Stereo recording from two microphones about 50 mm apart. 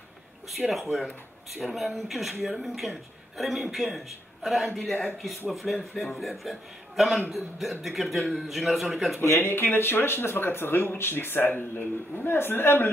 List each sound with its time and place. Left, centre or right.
0.5 s a man's voice: centre
9.4 s speech: left